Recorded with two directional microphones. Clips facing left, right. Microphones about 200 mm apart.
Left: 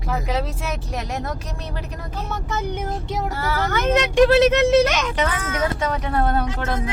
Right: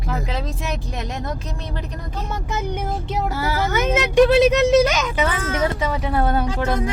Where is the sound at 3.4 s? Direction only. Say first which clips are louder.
Right 1 dB; 5° right (ahead or behind).